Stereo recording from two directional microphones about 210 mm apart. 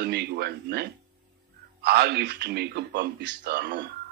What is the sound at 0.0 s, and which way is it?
A man's voice, 50° right (ahead or behind).